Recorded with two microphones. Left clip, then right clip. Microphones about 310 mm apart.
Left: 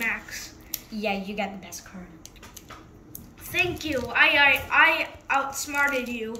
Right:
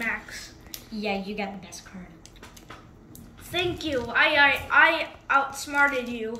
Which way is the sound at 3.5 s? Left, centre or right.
Centre.